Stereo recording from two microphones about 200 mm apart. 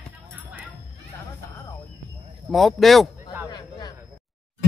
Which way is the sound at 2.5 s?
Centre (ahead or behind).